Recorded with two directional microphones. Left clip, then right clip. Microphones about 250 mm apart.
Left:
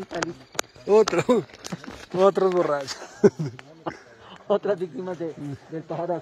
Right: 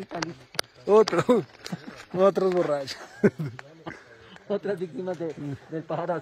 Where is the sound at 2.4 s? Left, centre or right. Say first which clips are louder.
Left 2 dB; centre.